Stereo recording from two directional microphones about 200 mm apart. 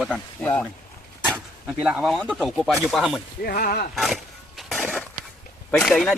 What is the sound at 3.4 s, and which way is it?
Speech, 50° left (ahead or behind).